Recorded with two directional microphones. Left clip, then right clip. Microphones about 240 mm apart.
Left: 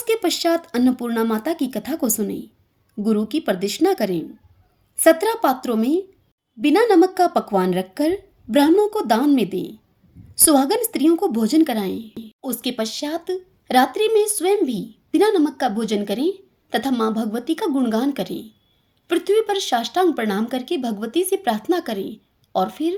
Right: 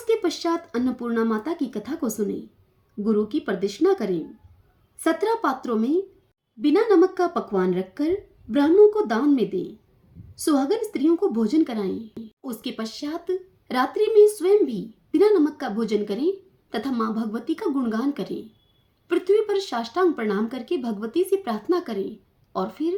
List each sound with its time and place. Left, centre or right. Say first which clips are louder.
0.1 s a woman's voice: left 4 dB; left